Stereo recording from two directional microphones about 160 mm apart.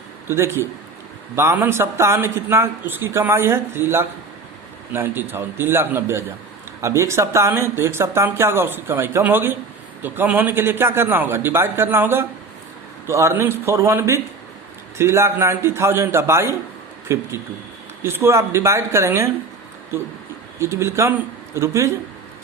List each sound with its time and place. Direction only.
0.3 s speech: 15° right (ahead or behind)
20.6 s speech: 15° right (ahead or behind)